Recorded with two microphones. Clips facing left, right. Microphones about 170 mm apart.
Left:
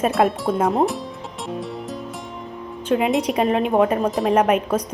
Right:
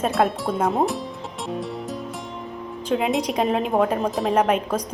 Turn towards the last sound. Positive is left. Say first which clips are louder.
# left 3 dB
turn(degrees=10)  # may be behind; listen again after turning